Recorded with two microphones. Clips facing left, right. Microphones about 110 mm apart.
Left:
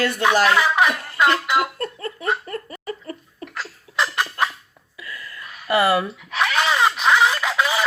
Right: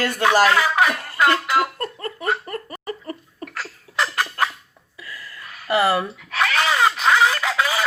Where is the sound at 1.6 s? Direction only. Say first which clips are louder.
Right 1 dB; 35° right (ahead or behind).